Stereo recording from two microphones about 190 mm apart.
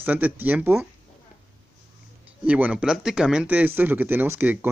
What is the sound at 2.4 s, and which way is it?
Speech, 5° right (ahead or behind).